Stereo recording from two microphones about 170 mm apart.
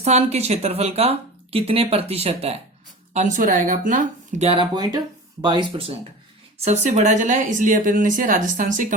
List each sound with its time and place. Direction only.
0.0 s speech: 40° right (ahead or behind)
4.5 s speech: 25° right (ahead or behind)
6.6 s speech: 40° right (ahead or behind)